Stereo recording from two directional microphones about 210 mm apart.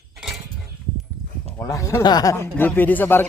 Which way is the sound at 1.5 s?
15° left (ahead or behind).